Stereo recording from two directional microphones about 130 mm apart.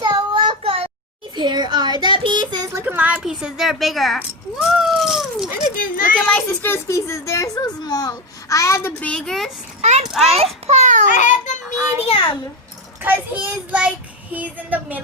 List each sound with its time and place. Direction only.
0.0 s child singing: 35° right (ahead or behind)
1.4 s a child's voice: 35° right (ahead or behind)
2.8 s a woman's voice: 15° right (ahead or behind)
4.7 s cat: centre (ahead or behind)
5.7 s a child's voice: 90° left
6.3 s a child's voice: 15° left (ahead or behind)
9.0 s a woman's voice: 10° left (ahead or behind)
9.8 s a child's voice: 60° right (ahead or behind)
10.1 s a woman's voice: centre (ahead or behind)
10.3 s a sound: 55° right (ahead or behind)
11.1 s child singing: 75° left (ahead or behind)
11.9 s a sound: 45° left (ahead or behind)
13.0 s a child's voice: 15° right (ahead or behind)